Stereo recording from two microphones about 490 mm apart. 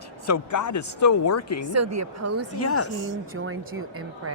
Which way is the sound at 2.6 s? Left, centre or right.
Left.